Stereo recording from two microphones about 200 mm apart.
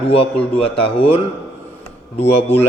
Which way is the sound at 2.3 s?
30° left (ahead or behind).